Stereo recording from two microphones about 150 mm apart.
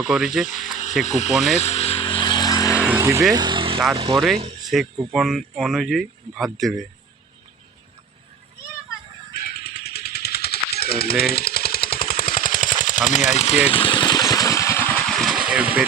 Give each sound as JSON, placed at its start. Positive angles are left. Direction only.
{"t": 0.1, "sound": "speech", "side_deg": -5}
{"t": 1.0, "sound": "speech", "side_deg": 50}
{"t": 1.5, "sound": "vehicle", "side_deg": 45}
{"t": 2.7, "sound": "vehicle", "side_deg": -10}
{"t": 3.0, "sound": "speech", "side_deg": -20}
{"t": 3.3, "sound": "vehicle", "side_deg": -30}
{"t": 4.1, "sound": "speech", "side_deg": 0}
{"t": 9.3, "sound": "a sound", "side_deg": 90}
{"t": 10.8, "sound": "jackhammer", "side_deg": 90}
{"t": 15.1, "sound": "vehicle", "side_deg": 0}